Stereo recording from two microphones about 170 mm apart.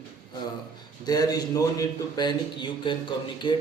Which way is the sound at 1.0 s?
20° left (ahead or behind).